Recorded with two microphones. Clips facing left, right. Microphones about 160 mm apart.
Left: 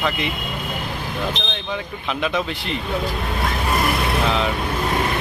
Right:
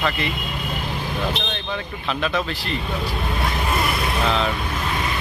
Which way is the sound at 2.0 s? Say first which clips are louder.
Left 1 dB; 15° left (ahead or behind).